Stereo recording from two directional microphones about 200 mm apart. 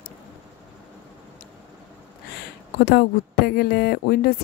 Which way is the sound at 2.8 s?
55° left (ahead or behind).